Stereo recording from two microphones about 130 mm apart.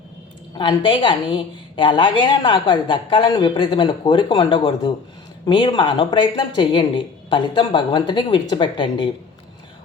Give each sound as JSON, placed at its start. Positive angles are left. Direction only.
{"t": 0.5, "sound": "a woman's voice", "side_deg": 40}